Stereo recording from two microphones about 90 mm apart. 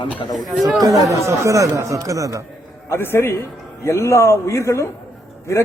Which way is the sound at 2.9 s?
25° left (ahead or behind).